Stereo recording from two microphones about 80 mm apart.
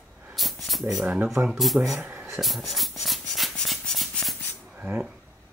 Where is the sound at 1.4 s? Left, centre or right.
Centre.